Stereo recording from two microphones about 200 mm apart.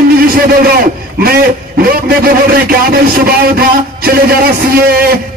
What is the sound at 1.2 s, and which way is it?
Speech, 50° right (ahead or behind).